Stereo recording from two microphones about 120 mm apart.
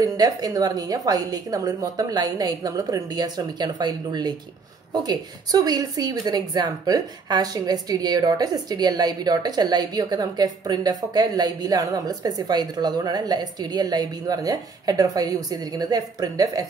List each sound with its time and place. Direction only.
0.0 s speech: 30° right (ahead or behind)